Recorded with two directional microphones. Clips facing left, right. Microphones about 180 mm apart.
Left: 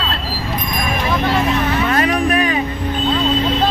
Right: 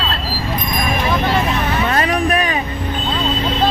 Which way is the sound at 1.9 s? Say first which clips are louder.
Even; 35° right (ahead or behind).